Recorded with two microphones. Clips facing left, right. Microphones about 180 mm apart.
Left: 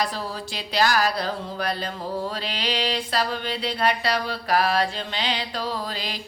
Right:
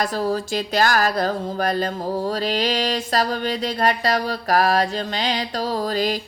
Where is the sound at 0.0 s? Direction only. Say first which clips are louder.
Right 6 dB; 45° right (ahead or behind).